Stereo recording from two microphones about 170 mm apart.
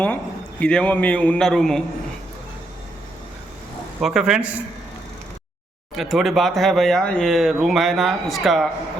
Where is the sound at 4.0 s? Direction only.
5° right (ahead or behind).